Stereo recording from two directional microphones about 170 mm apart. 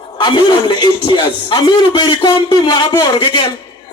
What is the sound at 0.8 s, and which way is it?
A man's voice, 30° left (ahead or behind).